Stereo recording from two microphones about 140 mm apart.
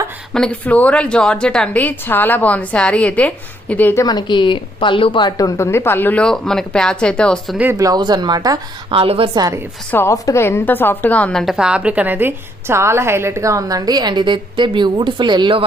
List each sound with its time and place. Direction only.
0.3 s a woman's voice: 5° left (ahead or behind)
4.0 s a woman's voice: 30° left (ahead or behind); by 7.5 s 5° left (ahead or behind)
7.5 s speech: 10° right (ahead or behind)
7.8 s a woman's voice: 25° right (ahead or behind)
9.0 s a woman's voice: 40° right (ahead or behind)
9.9 s a woman's voice: 20° left (ahead or behind)
11.4 s a woman's voice: 5° right (ahead or behind); by 15.6 s 35° right (ahead or behind)